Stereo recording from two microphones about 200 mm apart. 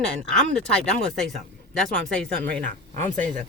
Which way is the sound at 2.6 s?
40° right (ahead or behind).